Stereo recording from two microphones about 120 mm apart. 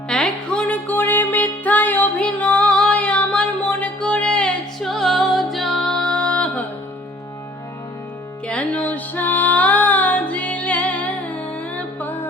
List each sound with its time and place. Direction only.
0.1 s music: 5° left (ahead or behind)
8.4 s music: 10° left (ahead or behind)